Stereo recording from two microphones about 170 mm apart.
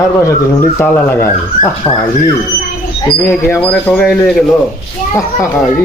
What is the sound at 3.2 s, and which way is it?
Speech, 15° left (ahead or behind).